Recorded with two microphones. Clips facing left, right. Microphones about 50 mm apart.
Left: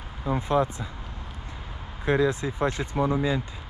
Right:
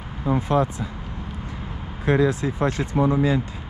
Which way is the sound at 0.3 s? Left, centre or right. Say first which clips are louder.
Right 5 dB; right.